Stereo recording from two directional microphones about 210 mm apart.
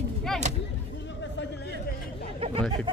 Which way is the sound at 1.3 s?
55° left (ahead or behind).